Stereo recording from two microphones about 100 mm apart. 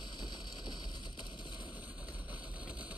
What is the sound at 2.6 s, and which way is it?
Vehicle, 15° right (ahead or behind).